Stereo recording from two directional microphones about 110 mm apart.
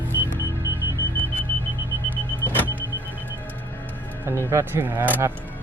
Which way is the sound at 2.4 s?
20° left (ahead or behind).